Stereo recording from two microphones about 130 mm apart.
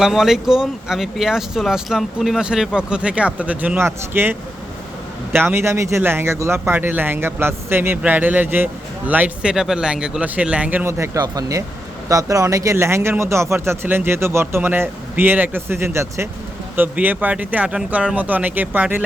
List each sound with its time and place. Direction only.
0.0 s a man's voice: 5° right (ahead or behind)